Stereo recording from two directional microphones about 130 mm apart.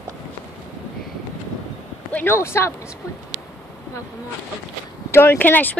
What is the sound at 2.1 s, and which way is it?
Speech, 20° left (ahead or behind).